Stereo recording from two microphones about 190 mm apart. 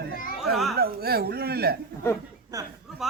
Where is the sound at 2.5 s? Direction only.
20° right (ahead or behind).